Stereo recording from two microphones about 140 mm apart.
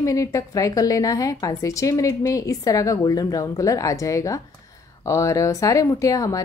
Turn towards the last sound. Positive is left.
turn(degrees=25)  # may be behind; listen again after turning